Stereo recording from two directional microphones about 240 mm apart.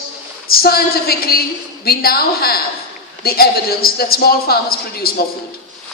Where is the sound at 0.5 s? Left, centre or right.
Left.